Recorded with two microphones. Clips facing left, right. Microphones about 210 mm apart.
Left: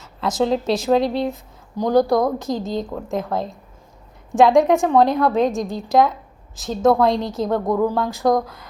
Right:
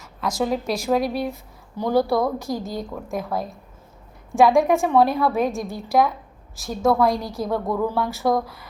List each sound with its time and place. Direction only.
0.2 s a woman's voice: 25° left (ahead or behind)
4.4 s a woman's voice: 20° left (ahead or behind)